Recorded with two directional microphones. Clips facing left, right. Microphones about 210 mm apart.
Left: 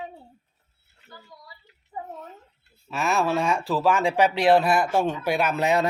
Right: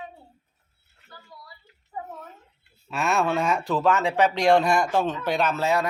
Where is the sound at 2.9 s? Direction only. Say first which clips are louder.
Even; centre (ahead or behind).